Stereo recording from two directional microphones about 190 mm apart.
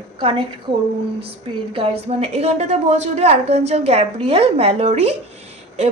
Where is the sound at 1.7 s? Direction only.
30° right (ahead or behind).